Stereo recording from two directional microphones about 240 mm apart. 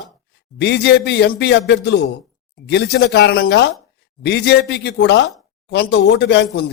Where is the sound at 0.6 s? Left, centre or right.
Left.